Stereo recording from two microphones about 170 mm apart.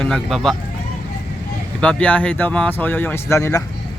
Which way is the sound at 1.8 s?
5° left (ahead or behind).